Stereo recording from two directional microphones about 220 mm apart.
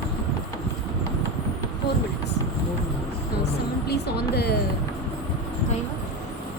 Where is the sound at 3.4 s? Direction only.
45° left (ahead or behind).